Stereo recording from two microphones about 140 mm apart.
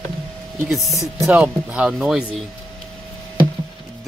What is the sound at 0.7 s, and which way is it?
Speech, centre (ahead or behind).